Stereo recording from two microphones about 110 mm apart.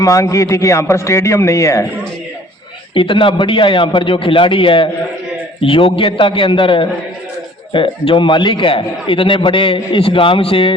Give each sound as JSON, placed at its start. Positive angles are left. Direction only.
{"t": 0.0, "sound": "a man's voice", "side_deg": 30}
{"t": 2.9, "sound": "a man's voice", "side_deg": 50}